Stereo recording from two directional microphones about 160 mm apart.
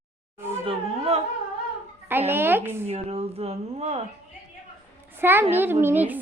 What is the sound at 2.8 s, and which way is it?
Speech, 40° right (ahead or behind).